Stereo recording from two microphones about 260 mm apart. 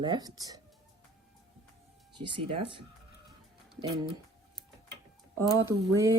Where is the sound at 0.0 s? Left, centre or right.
Centre.